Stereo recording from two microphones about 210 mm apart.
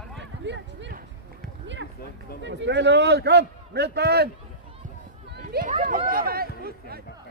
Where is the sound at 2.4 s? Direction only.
55° right (ahead or behind).